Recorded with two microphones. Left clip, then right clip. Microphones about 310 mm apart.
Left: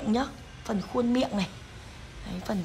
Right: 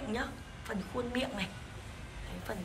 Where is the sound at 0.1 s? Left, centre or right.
Centre.